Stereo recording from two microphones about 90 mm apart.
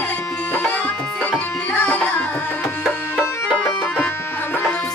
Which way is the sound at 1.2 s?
15° left (ahead or behind).